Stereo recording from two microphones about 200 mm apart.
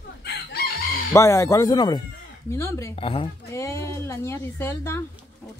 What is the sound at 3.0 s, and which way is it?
Speech, 25° left (ahead or behind).